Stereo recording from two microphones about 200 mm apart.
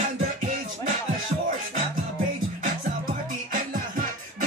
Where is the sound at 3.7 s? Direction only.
45° right (ahead or behind).